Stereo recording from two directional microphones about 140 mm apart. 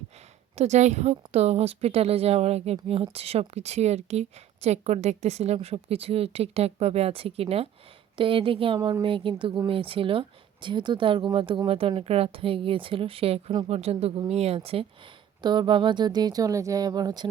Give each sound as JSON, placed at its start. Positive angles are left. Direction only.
{"t": 0.5, "sound": "a woman's voice", "side_deg": -50}
{"t": 15.4, "sound": "speech", "side_deg": -30}